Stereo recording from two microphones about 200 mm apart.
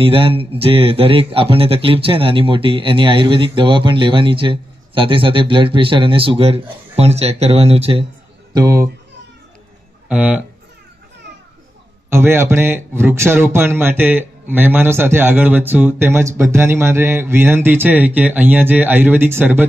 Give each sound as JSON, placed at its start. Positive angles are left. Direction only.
{"t": 0.0, "sound": "a man's voice", "side_deg": -25}
{"t": 8.5, "sound": "a man's voice", "side_deg": -15}
{"t": 10.0, "sound": "speech", "side_deg": -5}
{"t": 12.1, "sound": "a man's voice", "side_deg": -10}